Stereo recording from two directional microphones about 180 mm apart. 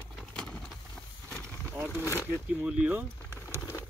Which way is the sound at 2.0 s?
15° left (ahead or behind).